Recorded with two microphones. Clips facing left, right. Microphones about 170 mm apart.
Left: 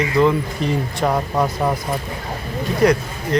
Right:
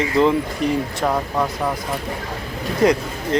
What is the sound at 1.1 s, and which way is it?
Speech, 10° left (ahead or behind).